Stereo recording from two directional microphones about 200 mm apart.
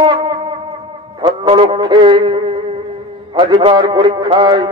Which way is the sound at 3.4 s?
25° right (ahead or behind).